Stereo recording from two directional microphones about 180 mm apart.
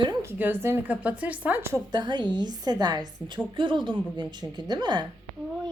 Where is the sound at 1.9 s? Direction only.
25° right (ahead or behind).